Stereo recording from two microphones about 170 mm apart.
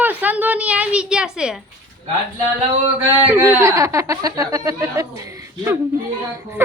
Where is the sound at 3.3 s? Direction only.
15° right (ahead or behind).